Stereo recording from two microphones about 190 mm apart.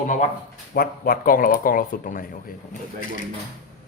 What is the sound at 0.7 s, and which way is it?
Speech, 50° left (ahead or behind).